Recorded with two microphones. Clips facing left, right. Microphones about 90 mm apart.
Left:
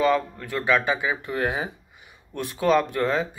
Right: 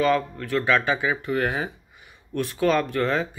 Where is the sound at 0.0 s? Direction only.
15° left (ahead or behind).